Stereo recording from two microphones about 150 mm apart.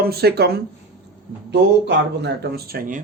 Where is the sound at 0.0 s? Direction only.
90° right.